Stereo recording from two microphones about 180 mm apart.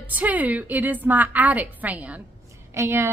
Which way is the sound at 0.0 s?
10° right (ahead or behind).